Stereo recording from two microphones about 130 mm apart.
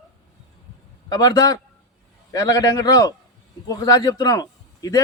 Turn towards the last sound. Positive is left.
turn(degrees=30)  # may be behind; listen again after turning